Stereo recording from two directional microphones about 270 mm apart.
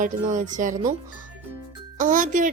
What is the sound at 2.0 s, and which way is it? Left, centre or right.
Speech, right.